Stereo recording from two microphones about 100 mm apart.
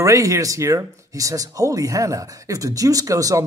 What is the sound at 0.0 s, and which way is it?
Speech, 35° right (ahead or behind).